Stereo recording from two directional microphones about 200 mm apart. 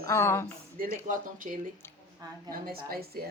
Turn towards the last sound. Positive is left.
turn(degrees=-50)  # may be behind; listen again after turning